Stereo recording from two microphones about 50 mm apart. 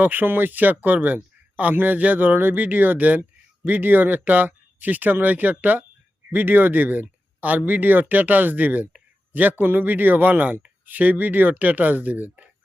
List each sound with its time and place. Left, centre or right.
0.0 s speech: right